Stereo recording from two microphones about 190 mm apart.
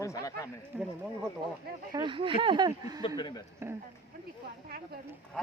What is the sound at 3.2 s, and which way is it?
Speech, 25° left (ahead or behind).